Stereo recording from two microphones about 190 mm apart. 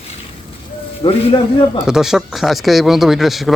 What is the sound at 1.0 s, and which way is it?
Speech, 30° left (ahead or behind).